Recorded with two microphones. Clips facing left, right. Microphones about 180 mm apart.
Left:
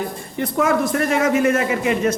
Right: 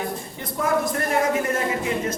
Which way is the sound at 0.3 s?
75° left (ahead or behind).